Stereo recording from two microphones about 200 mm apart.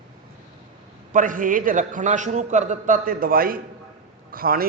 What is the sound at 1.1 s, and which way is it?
A man's voice, 40° right (ahead or behind).